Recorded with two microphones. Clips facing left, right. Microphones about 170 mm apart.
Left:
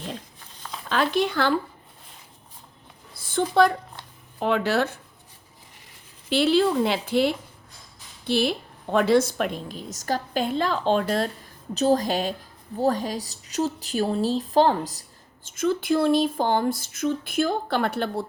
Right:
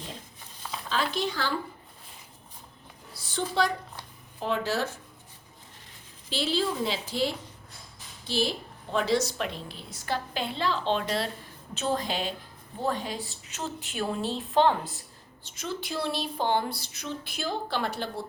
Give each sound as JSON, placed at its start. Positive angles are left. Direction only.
{"t": 0.9, "sound": "speech", "side_deg": 60}
{"t": 3.2, "sound": "a sound", "side_deg": 50}
{"t": 4.4, "sound": "speech", "side_deg": 65}
{"t": 6.3, "sound": "a woman's voice", "side_deg": 60}
{"t": 15.4, "sound": "a woman's voice", "side_deg": 50}